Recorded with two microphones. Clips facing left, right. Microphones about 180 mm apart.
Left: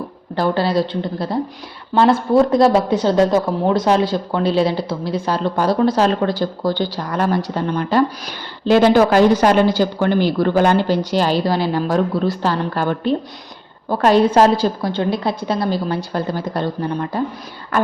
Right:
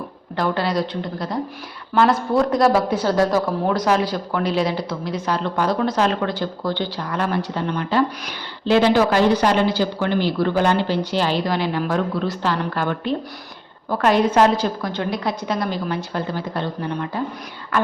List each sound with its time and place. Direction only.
0.3 s a woman's voice: 30° left (ahead or behind)